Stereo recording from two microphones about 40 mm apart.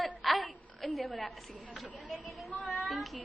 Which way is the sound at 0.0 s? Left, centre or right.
Centre.